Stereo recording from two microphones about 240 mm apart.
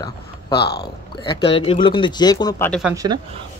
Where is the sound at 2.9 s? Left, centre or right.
Centre.